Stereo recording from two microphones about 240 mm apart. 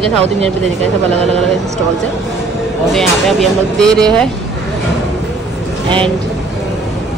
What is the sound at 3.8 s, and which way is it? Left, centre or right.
Speech, centre.